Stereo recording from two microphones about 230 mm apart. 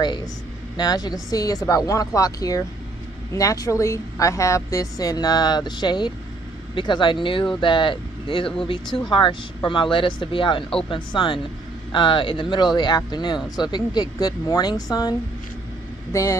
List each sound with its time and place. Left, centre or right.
0.0 s speech: centre